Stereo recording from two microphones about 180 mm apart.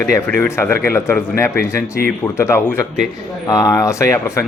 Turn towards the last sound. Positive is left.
turn(degrees=15)  # may be behind; listen again after turning